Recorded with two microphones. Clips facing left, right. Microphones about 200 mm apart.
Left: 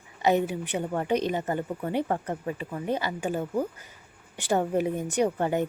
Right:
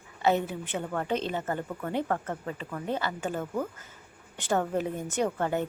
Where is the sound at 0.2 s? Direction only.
15° left (ahead or behind).